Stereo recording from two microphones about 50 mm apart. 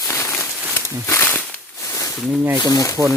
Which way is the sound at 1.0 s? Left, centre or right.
Left.